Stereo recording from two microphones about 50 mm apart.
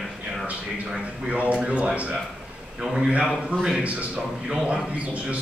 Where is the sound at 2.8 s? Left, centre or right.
Centre.